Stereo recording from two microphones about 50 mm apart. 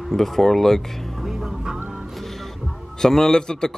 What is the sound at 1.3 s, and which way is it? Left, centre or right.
Music, centre.